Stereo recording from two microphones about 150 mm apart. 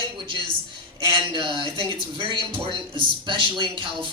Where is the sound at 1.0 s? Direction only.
30° right (ahead or behind).